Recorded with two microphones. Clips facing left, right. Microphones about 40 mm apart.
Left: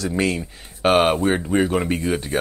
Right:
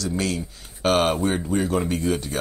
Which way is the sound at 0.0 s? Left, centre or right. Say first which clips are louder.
Left 4 dB; left.